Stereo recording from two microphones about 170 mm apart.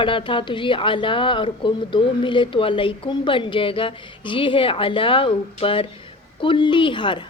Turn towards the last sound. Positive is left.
turn(degrees=30)  # may be behind; listen again after turning